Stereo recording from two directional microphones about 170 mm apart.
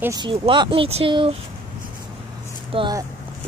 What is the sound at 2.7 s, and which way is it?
Speech, 25° right (ahead or behind).